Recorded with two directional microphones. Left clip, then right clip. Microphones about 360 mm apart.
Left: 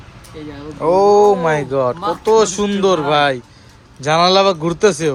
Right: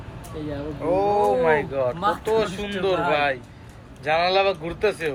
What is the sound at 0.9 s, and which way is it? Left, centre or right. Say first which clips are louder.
Speech: left 9 dB; centre.